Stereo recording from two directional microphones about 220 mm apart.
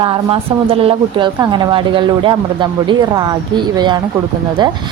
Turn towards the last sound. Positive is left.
turn(degrees=-20)  # may be behind; listen again after turning